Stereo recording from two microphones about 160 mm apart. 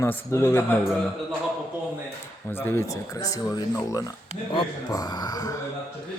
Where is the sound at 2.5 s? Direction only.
15° left (ahead or behind).